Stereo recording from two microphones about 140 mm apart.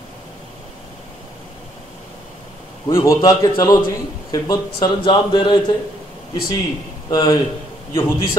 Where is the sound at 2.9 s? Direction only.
20° left (ahead or behind).